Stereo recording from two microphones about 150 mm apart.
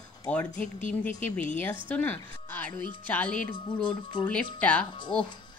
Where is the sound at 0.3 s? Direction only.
10° left (ahead or behind).